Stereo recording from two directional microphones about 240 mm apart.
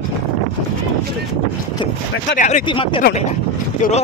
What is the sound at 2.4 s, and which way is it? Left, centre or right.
Speech, left.